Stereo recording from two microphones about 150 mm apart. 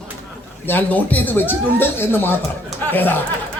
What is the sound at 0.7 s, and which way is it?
A woman's voice, 10° left (ahead or behind).